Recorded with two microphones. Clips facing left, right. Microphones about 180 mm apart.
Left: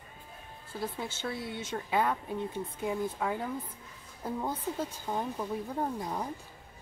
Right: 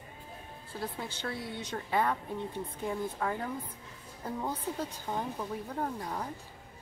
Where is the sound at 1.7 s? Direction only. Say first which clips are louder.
Left 1 dB; 5° left (ahead or behind).